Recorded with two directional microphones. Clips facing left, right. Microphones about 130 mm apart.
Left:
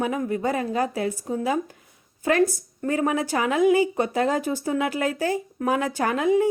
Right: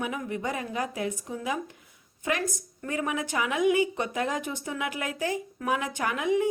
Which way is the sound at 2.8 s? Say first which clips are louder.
Left 7 dB; 40° left (ahead or behind).